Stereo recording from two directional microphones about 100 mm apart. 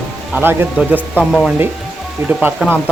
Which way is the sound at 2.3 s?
20° right (ahead or behind).